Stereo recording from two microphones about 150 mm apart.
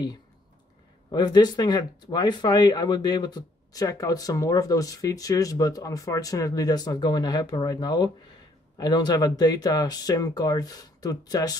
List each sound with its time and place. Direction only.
1.1 s speech: 30° left (ahead or behind)